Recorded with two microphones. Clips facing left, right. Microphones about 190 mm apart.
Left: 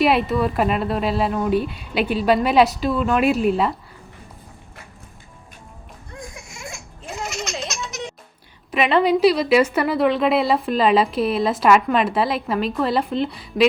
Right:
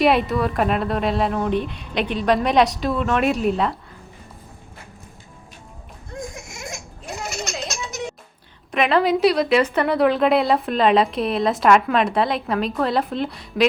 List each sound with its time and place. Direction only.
0.0 s a woman's voice: centre (ahead or behind)
6.1 s a sound: 45° right (ahead or behind)
8.7 s a woman's voice: centre (ahead or behind)